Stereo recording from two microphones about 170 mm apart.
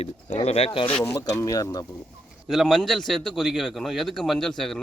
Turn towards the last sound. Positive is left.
turn(degrees=0)  # may be behind; listen again after turning